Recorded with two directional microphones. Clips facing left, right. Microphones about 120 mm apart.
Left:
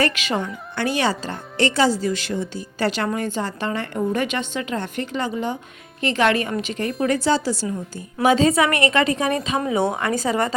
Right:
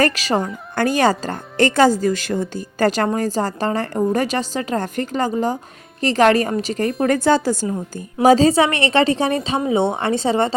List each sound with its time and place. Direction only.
0.0 s a woman's voice: 35° right (ahead or behind)